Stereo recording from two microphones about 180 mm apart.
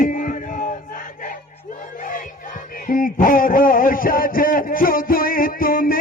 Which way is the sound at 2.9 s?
50° left (ahead or behind).